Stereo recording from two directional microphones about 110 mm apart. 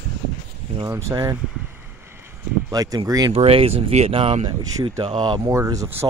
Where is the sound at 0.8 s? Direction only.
30° right (ahead or behind).